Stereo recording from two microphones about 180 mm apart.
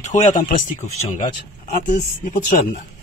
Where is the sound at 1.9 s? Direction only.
45° left (ahead or behind).